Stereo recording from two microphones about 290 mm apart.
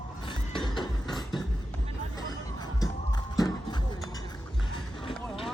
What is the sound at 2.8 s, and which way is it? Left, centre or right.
Music, centre.